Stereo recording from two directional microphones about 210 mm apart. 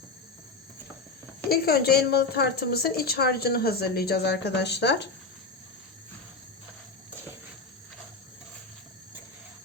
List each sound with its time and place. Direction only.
1.5 s a woman's voice: 50° left (ahead or behind)